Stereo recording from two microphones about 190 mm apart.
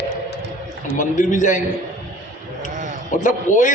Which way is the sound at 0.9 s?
40° left (ahead or behind).